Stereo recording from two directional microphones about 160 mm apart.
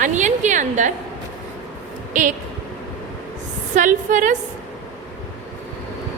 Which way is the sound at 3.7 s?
50° right (ahead or behind).